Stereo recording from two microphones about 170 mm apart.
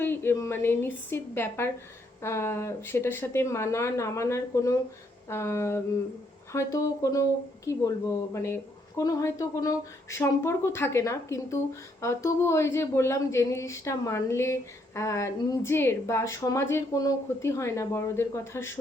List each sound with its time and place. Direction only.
0.0 s speech: 10° left (ahead or behind)